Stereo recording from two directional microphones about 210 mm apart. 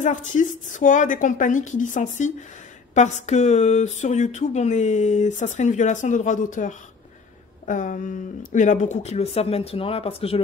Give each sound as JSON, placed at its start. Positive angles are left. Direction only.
{"t": 0.0, "sound": "speech", "side_deg": 35}